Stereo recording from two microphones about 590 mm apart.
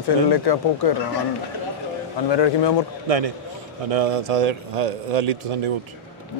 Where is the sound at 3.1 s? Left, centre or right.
Right.